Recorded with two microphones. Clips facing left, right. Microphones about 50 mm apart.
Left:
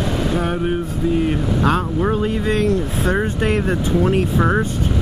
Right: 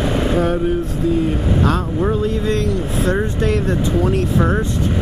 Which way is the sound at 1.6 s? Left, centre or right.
Centre.